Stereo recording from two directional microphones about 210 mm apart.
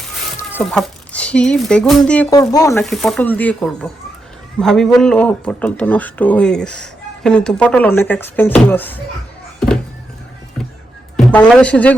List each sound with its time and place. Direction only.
0.3 s speech: 5° left (ahead or behind)
2.5 s speech: 15° left (ahead or behind)
2.8 s speech: centre (ahead or behind)
11.3 s speech: 5° left (ahead or behind)